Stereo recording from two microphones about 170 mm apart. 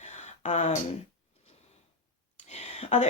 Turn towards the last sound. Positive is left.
turn(degrees=45)  # may be behind; listen again after turning